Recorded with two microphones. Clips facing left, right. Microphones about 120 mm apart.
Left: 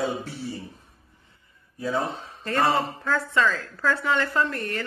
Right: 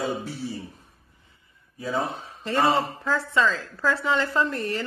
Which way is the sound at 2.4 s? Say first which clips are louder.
Right 1 dB; 20° right (ahead or behind).